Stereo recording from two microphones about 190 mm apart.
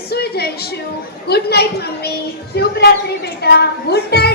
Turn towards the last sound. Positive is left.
turn(degrees=60)  # may be behind; listen again after turning